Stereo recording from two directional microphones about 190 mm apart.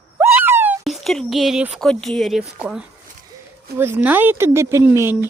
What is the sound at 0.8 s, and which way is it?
Speech, centre (ahead or behind).